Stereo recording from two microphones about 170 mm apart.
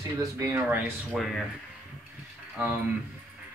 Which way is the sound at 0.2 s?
20° right (ahead or behind).